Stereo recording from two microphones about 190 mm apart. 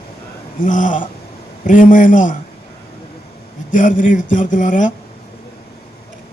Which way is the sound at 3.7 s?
45° left (ahead or behind).